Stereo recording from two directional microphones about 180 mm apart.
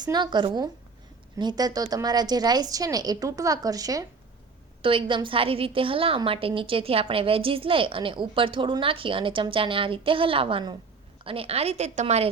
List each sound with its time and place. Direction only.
0.0 s a woman's voice: 25° right (ahead or behind)